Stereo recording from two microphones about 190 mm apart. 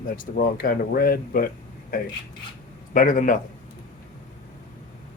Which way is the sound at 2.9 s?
45° left (ahead or behind).